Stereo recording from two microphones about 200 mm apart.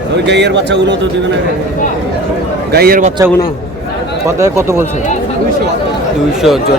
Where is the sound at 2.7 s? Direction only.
50° right (ahead or behind).